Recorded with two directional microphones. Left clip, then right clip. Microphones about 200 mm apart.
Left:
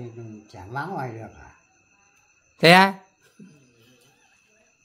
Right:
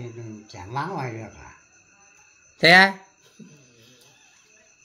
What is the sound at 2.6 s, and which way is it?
Speech, 30° left (ahead or behind).